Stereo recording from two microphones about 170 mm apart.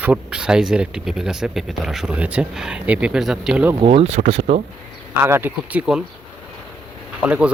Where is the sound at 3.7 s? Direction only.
30° right (ahead or behind).